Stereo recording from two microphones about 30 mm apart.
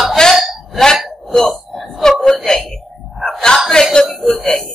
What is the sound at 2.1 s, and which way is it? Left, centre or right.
Wail, centre.